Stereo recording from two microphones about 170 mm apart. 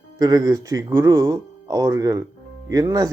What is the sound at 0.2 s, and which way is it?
Speech, 20° right (ahead or behind).